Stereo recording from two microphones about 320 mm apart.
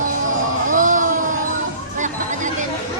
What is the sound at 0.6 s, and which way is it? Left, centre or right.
Music, right.